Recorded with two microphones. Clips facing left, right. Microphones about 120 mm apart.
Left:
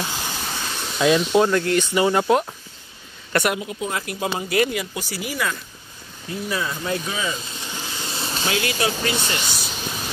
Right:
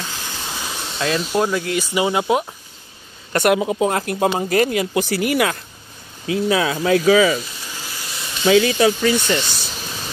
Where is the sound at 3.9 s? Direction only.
45° right (ahead or behind).